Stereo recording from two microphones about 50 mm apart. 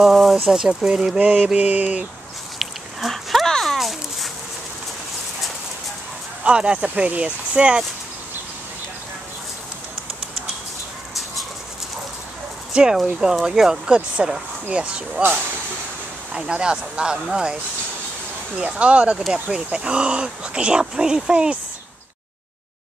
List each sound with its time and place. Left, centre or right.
0.0 s speech: centre
1.2 s mantra: right
1.6 s speech: right
2.6 s a sound: centre
3.7 s a sound: centre
6.4 s speech: right
12.7 s speech: centre
16.3 s speech: centre
18.6 s speech: right